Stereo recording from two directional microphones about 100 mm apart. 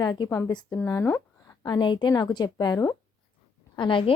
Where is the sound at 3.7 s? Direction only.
55° left (ahead or behind).